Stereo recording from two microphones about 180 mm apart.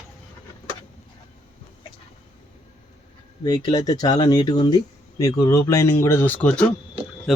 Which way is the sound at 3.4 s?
20° left (ahead or behind).